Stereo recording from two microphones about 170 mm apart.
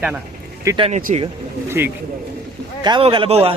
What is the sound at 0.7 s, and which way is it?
Speech, 35° right (ahead or behind).